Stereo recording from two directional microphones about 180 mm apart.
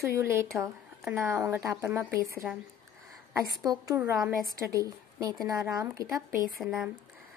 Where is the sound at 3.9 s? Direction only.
15° right (ahead or behind).